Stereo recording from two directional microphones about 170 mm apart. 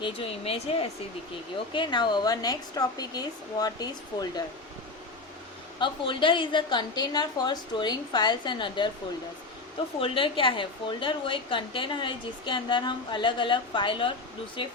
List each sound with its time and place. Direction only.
0.0 s a woman's voice: 35° left (ahead or behind)
5.8 s a woman's voice: 30° left (ahead or behind)
10.0 s a woman's voice: 30° left (ahead or behind)